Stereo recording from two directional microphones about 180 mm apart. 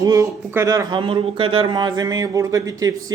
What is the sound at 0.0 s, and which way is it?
Speech, 20° right (ahead or behind).